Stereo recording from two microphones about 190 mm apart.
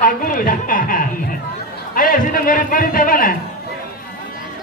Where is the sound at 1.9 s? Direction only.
45° left (ahead or behind).